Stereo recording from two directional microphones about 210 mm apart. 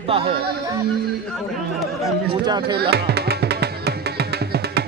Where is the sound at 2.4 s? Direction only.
20° right (ahead or behind).